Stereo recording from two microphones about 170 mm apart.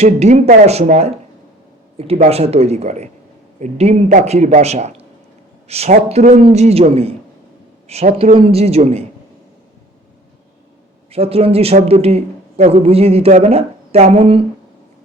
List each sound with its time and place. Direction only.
0.0 s speech: 40° right (ahead or behind)
11.1 s speech: 35° right (ahead or behind)